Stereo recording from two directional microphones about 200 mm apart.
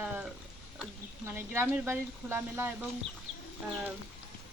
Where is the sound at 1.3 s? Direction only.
10° right (ahead or behind).